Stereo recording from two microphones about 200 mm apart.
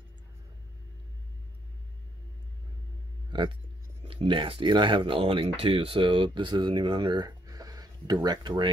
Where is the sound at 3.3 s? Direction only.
25° right (ahead or behind).